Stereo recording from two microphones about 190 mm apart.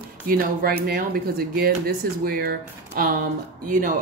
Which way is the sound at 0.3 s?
50° right (ahead or behind).